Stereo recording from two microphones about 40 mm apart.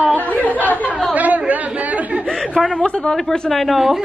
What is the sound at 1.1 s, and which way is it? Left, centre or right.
Speech, right.